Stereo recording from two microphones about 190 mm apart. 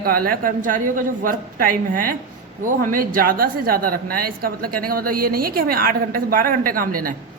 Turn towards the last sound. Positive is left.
turn(degrees=-50)  # may be behind; listen again after turning